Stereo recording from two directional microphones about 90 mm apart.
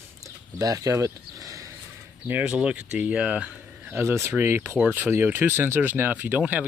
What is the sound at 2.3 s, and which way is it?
Speech, 15° right (ahead or behind).